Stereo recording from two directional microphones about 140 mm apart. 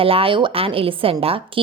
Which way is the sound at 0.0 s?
40° right (ahead or behind).